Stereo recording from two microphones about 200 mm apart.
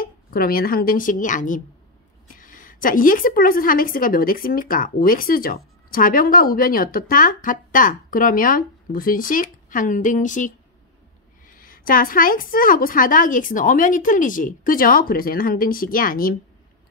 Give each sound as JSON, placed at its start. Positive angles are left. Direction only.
{"t": 0.0, "sound": "a woman's voice", "side_deg": 45}